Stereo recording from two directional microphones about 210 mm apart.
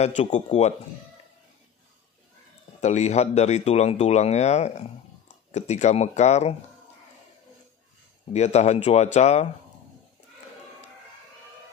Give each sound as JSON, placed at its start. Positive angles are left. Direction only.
{"t": 0.0, "sound": "speech", "side_deg": 35}
{"t": 2.8, "sound": "speech", "side_deg": 30}
{"t": 8.3, "sound": "speech", "side_deg": 30}